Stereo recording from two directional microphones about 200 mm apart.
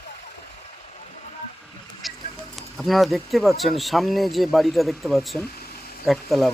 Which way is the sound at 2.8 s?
Centre (ahead or behind).